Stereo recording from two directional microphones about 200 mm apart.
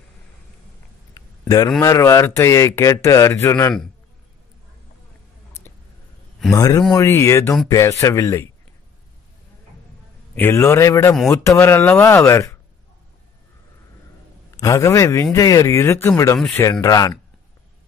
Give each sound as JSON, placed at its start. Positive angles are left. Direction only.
{"t": 1.8, "sound": "speech", "side_deg": 15}
{"t": 6.5, "sound": "speech", "side_deg": 15}
{"t": 10.3, "sound": "speech", "side_deg": 10}
{"t": 14.6, "sound": "speech", "side_deg": 15}
{"t": 16.8, "sound": "speech", "side_deg": 15}